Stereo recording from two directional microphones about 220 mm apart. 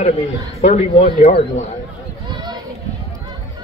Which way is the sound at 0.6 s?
30° left (ahead or behind).